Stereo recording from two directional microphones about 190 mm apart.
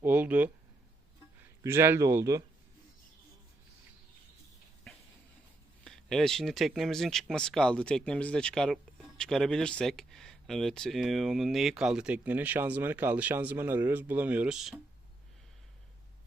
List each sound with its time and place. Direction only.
0.0 s speech: 10° right (ahead or behind)
1.6 s speech: 10° right (ahead or behind)
5.8 s speech: 5° left (ahead or behind)